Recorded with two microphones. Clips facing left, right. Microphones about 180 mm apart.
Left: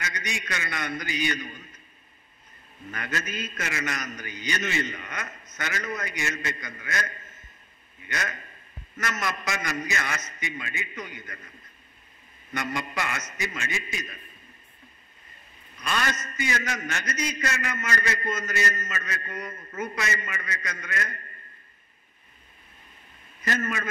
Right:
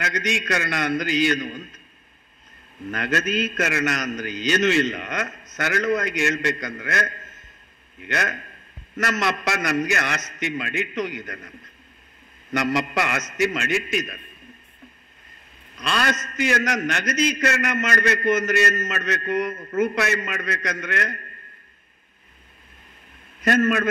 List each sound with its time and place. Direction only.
0.0 s a man's voice: 90° right
2.9 s a man's voice: 80° right
15.7 s a man's voice: 80° right
17.9 s a man's voice: 65° right (ahead or behind)
23.4 s a man's voice: 70° right (ahead or behind)